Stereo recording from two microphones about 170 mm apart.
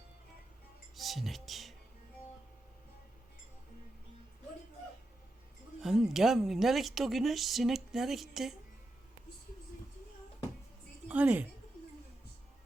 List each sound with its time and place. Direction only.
0.9 s music: centre (ahead or behind)
5.8 s speech: centre (ahead or behind)
11.1 s a woman's voice: 10° right (ahead or behind)